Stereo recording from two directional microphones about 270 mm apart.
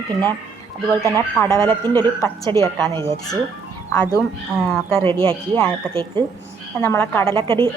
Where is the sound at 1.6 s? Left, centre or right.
Centre.